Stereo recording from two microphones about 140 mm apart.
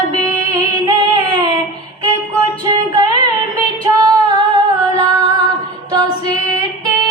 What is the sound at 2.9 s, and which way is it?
Female singing, 30° right (ahead or behind).